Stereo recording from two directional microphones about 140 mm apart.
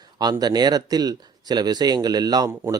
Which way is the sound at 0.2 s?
30° right (ahead or behind).